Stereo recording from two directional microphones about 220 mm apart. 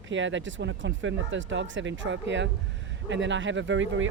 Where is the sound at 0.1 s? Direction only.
60° right (ahead or behind).